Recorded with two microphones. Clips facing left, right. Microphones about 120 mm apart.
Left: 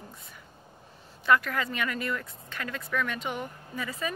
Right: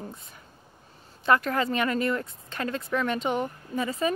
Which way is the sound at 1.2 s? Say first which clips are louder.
Right 2 dB; 30° right (ahead or behind).